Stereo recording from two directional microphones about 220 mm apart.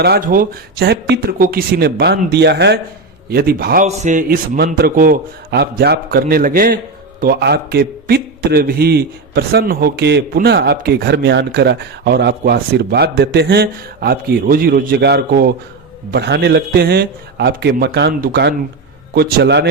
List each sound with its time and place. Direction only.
0.0 s a man's voice: 45° right (ahead or behind)
3.8 s a man's voice: 30° right (ahead or behind); by 19.6 s 50° right (ahead or behind)